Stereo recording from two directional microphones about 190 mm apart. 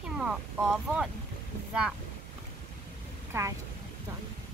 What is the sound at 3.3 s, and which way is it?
Speech, 15° right (ahead or behind).